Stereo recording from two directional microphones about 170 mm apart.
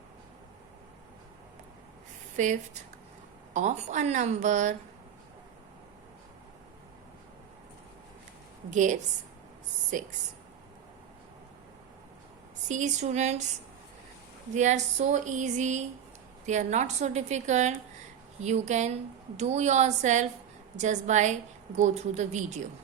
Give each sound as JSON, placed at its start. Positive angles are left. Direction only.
{"t": 2.3, "sound": "a woman's voice", "side_deg": -45}
{"t": 8.7, "sound": "a woman's voice", "side_deg": -45}
{"t": 12.6, "sound": "a woman's voice", "side_deg": -45}
{"t": 14.5, "sound": "a woman's voice", "side_deg": -45}